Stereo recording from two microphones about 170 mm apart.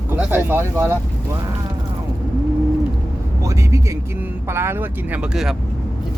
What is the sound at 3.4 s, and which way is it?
Vehicle, 15° right (ahead or behind).